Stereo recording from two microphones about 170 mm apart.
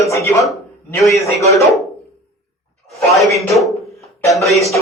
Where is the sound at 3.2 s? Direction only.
Centre (ahead or behind).